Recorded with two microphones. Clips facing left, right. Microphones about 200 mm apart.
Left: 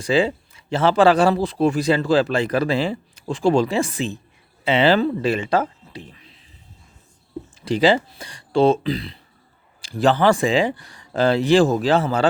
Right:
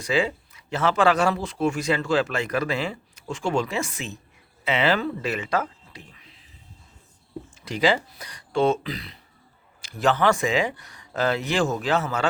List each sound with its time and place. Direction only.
0.0 s a man's voice: 30° left (ahead or behind)
7.5 s a man's voice: 30° left (ahead or behind)